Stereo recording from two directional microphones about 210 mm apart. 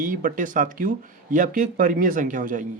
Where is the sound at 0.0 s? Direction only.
40° right (ahead or behind).